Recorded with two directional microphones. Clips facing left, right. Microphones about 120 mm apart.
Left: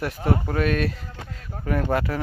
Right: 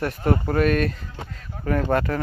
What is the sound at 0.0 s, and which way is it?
Speech, centre (ahead or behind).